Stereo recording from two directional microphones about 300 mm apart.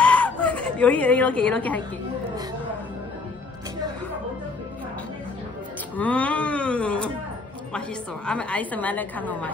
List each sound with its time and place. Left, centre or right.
0.0 s a sound: centre
5.9 s a woman's voice: centre
8.3 s a woman's voice: centre